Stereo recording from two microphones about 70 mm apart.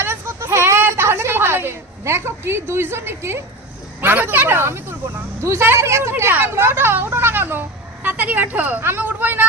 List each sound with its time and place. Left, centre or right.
0.0 s a sound: right
4.0 s a woman's voice: right
8.0 s a woman's voice: right
8.8 s a woman's voice: right